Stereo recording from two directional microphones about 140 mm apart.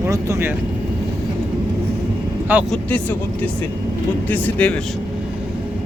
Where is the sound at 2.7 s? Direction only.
10° left (ahead or behind).